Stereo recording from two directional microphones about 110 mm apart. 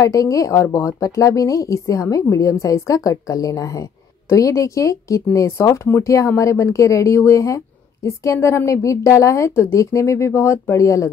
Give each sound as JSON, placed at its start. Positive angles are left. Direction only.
{"t": 0.0, "sound": "a woman's voice", "side_deg": 30}